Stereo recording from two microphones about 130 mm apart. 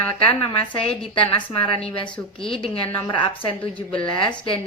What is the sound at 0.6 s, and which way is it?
A woman's voice, 45° left (ahead or behind).